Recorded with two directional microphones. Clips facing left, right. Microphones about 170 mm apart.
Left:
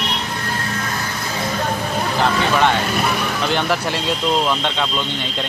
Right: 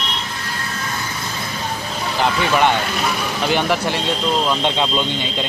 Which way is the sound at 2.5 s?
5° right (ahead or behind).